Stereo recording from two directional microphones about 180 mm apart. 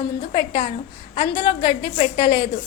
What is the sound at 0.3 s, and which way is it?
A woman's voice, 30° left (ahead or behind).